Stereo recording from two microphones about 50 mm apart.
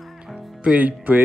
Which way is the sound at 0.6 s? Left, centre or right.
Right.